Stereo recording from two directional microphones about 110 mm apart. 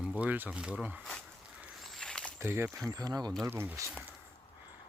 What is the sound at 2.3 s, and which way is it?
Speech, 20° right (ahead or behind).